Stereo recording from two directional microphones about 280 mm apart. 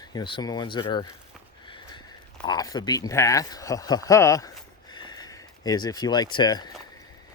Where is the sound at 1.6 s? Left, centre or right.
Centre.